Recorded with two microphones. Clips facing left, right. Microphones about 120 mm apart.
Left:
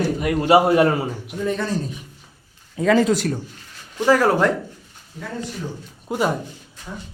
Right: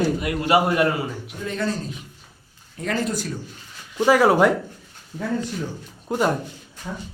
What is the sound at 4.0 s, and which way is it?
Speech, 10° right (ahead or behind).